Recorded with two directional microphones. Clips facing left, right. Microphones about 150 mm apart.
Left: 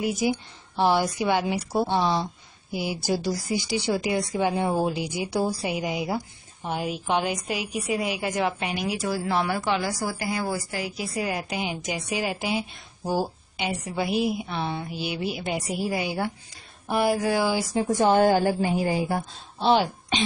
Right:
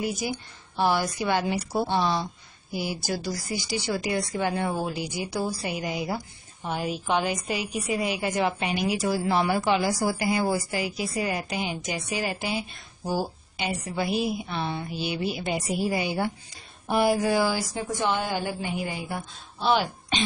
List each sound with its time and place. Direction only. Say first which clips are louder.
0.0 s a woman's voice: left 4 dB; 20° left (ahead or behind)
3.9 s a woman's voice: left 2 dB; 10° left (ahead or behind); by 5.6 s 25° left (ahead or behind)
5.6 s a woman's voice: left 2 dB; 10° left (ahead or behind)
17.4 s a woman's voice: left 1 dB; 15° left (ahead or behind)
17.8 s a woman's voice: left 9 dB; 40° left (ahead or behind); by 20.2 s 25° left (ahead or behind)